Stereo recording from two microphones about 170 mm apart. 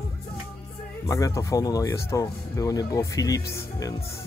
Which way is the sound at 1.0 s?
20° left (ahead or behind).